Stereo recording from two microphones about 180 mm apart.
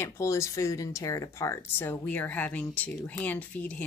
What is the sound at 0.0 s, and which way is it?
Speech, 15° left (ahead or behind).